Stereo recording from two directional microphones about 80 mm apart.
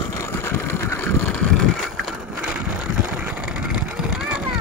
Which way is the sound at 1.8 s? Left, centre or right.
Centre.